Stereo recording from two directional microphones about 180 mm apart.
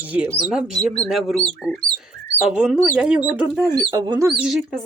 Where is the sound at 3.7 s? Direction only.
20° right (ahead or behind).